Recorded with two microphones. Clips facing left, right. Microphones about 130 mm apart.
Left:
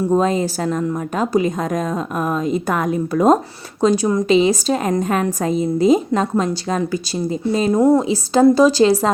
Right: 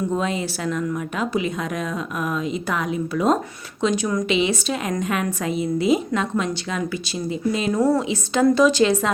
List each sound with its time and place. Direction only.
0.1 s a woman's voice: 40° left (ahead or behind)
8.0 s a woman's voice: 35° left (ahead or behind)